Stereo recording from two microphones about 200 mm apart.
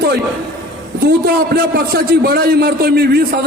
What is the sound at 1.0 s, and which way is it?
A man's voice, 50° right (ahead or behind).